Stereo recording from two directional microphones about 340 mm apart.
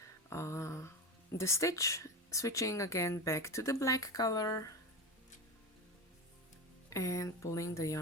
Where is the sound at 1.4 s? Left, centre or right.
Centre.